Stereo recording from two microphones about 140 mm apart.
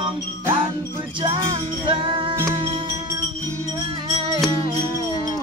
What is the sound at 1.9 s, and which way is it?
Music, 35° right (ahead or behind).